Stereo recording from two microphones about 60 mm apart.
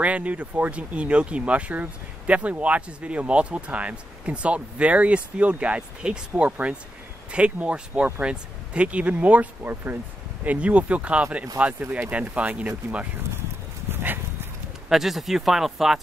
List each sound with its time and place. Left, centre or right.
0.0 s speech: right
10.4 s speech: right
13.8 s dog: right
14.9 s speech: centre